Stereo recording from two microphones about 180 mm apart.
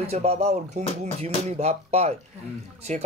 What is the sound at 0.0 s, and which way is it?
A man's voice, 35° right (ahead or behind).